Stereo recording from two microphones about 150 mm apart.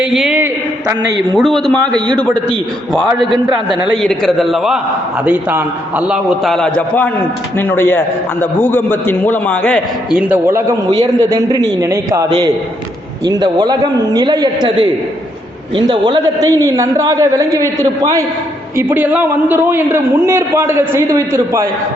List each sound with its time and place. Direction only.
0.0 s a man's voice: 5° right (ahead or behind)
3.7 s a man's voice: 5° left (ahead or behind)
6.5 s a man's voice: 5° left (ahead or behind)
10.1 s a man's voice: 10° right (ahead or behind)